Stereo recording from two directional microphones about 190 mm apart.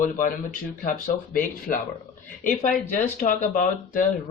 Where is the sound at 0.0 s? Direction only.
45° left (ahead or behind).